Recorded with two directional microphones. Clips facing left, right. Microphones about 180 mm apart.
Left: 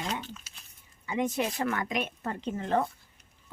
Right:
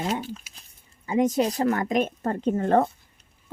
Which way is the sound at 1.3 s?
40° right (ahead or behind).